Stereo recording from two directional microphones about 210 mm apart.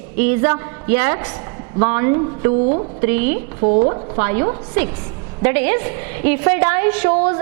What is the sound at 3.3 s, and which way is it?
Speech, 40° right (ahead or behind).